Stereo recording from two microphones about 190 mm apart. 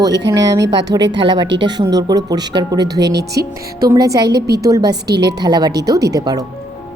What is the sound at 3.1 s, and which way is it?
Speech, 60° right (ahead or behind).